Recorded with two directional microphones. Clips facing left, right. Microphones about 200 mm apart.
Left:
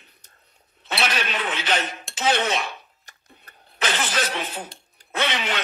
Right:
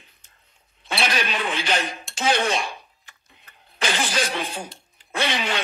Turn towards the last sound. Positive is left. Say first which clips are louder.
# right 1 dB
turn(degrees=-10)  # may be behind; listen again after turning